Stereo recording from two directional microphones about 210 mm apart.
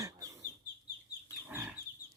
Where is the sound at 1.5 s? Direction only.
10° right (ahead or behind).